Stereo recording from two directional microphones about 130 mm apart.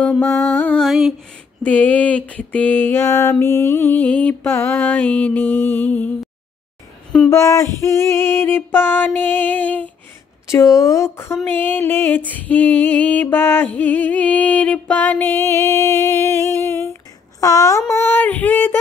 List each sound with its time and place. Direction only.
0.2 s music: 15° left (ahead or behind)
0.8 s a sound: centre (ahead or behind)
1.6 s music: 10° left (ahead or behind)
7.2 s music: 25° left (ahead or behind)
10.5 s speech: 25° left (ahead or behind)
11.4 s music: 15° left (ahead or behind)